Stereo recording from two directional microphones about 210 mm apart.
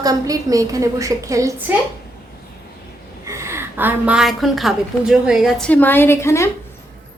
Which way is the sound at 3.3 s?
15° right (ahead or behind).